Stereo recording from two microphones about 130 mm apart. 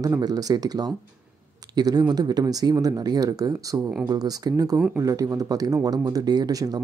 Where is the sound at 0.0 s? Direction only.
30° right (ahead or behind).